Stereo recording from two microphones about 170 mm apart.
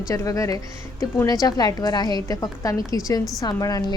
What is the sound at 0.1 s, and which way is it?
Speech, 20° left (ahead or behind).